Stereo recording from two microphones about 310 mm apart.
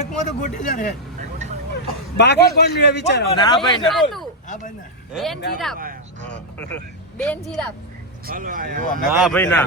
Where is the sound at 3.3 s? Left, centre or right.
Centre.